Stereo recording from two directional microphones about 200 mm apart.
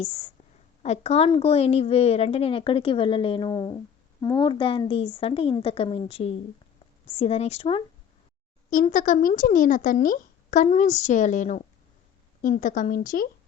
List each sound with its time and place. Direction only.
0.0 s a woman's voice: 30° left (ahead or behind)
8.7 s speech: 40° left (ahead or behind)